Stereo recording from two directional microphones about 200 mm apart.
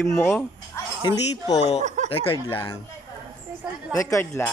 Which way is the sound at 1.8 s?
35° right (ahead or behind).